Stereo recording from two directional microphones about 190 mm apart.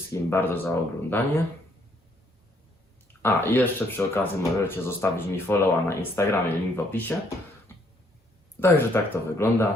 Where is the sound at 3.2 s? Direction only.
10° left (ahead or behind).